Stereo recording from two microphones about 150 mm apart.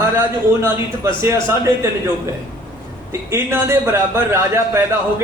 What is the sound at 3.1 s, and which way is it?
A man's voice, 15° right (ahead or behind).